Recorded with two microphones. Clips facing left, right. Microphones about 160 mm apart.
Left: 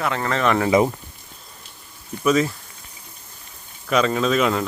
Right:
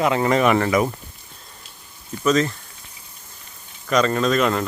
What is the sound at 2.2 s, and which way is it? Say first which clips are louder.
Speech: even; 10° left (ahead or behind).